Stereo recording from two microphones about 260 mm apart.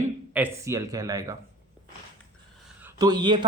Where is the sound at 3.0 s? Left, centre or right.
Centre.